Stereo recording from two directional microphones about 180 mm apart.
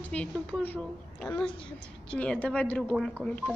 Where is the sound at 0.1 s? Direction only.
5° left (ahead or behind).